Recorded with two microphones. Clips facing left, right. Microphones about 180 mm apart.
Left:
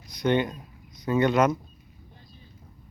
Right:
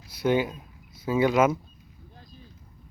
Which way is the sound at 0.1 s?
5° right (ahead or behind).